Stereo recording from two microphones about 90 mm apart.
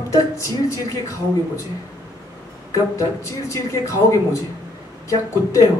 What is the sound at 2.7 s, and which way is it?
A man's voice, 30° left (ahead or behind).